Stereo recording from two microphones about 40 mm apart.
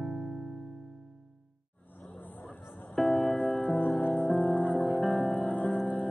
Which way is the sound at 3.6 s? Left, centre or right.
Left.